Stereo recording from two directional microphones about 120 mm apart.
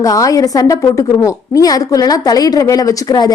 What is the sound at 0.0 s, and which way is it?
A woman's voice, 30° left (ahead or behind).